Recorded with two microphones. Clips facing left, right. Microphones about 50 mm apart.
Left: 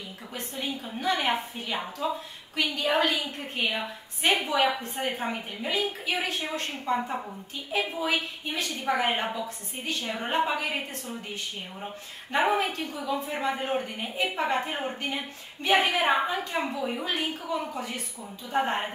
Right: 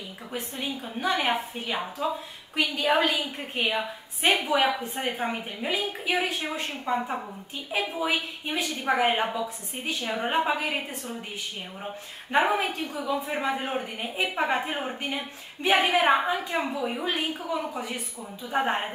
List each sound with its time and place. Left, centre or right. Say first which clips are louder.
0.3 s a woman's voice: right 1 dB; centre
12.4 s a woman's voice: right 1 dB; centre